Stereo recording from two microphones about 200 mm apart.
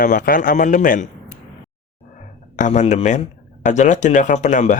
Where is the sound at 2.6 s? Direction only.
35° left (ahead or behind).